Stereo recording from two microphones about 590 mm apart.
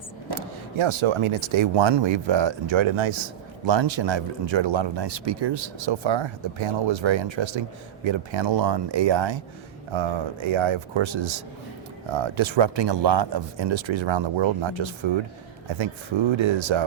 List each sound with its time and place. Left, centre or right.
0.3 s speech: right